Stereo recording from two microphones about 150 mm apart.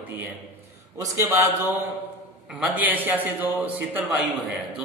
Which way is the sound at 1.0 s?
20° right (ahead or behind).